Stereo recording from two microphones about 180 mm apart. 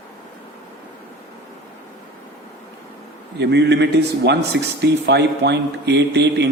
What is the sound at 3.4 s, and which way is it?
Speech, 70° right (ahead or behind).